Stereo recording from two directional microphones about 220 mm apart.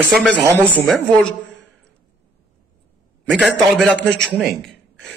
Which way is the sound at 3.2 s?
Centre (ahead or behind).